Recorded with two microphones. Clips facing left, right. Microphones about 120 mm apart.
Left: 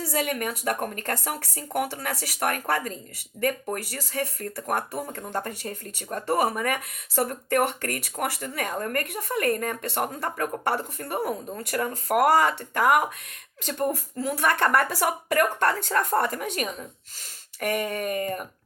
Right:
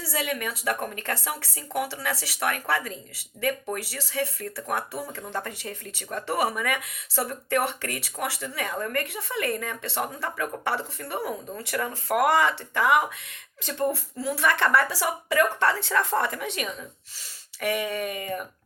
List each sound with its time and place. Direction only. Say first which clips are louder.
0.0 s speech: left 2 dB; 50° left (ahead or behind)